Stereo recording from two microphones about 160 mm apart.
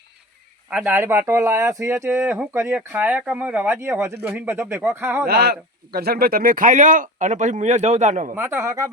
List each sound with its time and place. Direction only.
0.7 s speech: 10° right (ahead or behind)
5.3 s speech: 85° right; by 8.4 s 50° right (ahead or behind)
8.4 s speech: 15° right (ahead or behind)